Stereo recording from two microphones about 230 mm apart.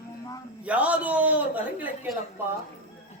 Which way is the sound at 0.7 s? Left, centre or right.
Centre.